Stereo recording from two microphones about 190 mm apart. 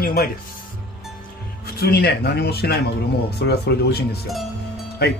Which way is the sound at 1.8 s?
55° left (ahead or behind).